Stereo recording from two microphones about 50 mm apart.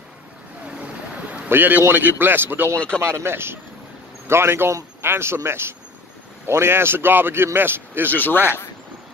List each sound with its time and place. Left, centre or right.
1.5 s a man's voice: right
8.1 s speech: left